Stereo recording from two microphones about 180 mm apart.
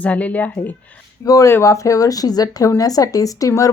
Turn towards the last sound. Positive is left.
turn(degrees=20)  # may be behind; listen again after turning